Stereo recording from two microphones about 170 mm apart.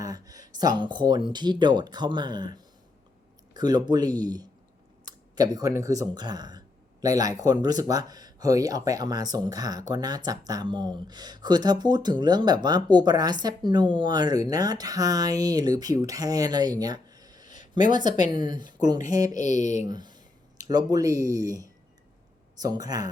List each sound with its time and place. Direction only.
0.0 s a sound: 20° right (ahead or behind)
0.8 s speech: 25° right (ahead or behind)
17.4 s a sound: 45° left (ahead or behind)
18.3 s speech: 25° right (ahead or behind)
19.4 s speech: 45° left (ahead or behind)
19.9 s speech: 25° right (ahead or behind)